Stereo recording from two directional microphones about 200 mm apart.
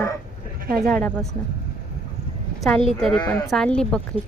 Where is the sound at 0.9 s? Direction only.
5° left (ahead or behind).